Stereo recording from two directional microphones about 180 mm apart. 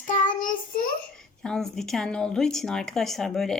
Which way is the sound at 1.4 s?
Centre (ahead or behind).